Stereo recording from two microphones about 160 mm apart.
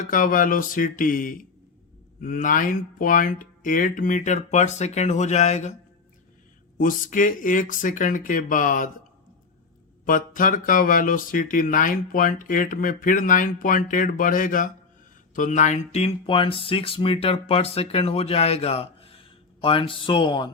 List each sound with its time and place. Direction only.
0.1 s speech: 60° left (ahead or behind)
6.7 s speech: 60° left (ahead or behind)
10.1 s speech: 60° left (ahead or behind); by 20.5 s 30° left (ahead or behind)